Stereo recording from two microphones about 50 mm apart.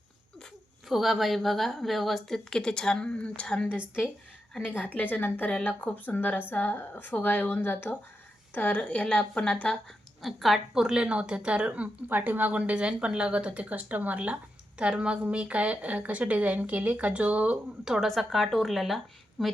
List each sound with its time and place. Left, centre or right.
0.9 s a woman's voice: centre
4.7 s a woman's voice: left
8.8 s speech: left
10.2 s a woman's voice: centre
10.8 s a woman's voice: centre
12.0 s a woman's voice: right
14.8 s a woman's voice: centre
18.0 s a woman's voice: centre